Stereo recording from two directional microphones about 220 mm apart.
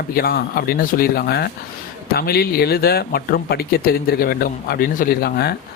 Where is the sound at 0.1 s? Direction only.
45° left (ahead or behind).